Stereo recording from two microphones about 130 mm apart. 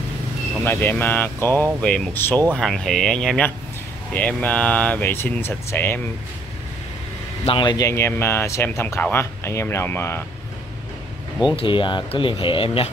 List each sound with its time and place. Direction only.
0.7 s speech: 15° left (ahead or behind)
2.5 s speech: 5° left (ahead or behind)
7.4 s speech: 35° left (ahead or behind); by 10.2 s 20° left (ahead or behind)
11.5 s speech: 40° left (ahead or behind)